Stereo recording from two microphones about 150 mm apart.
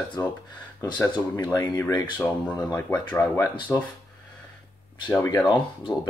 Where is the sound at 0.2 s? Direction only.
20° left (ahead or behind).